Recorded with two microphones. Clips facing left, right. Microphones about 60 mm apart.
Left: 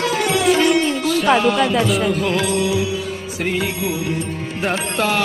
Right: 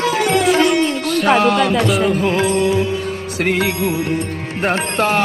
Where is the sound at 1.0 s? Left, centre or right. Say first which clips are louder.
Even; right.